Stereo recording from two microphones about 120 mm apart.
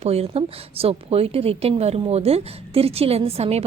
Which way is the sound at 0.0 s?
60° right (ahead or behind).